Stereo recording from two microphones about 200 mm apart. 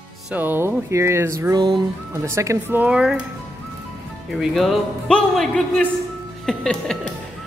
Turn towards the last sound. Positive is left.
turn(degrees=5)  # may be behind; listen again after turning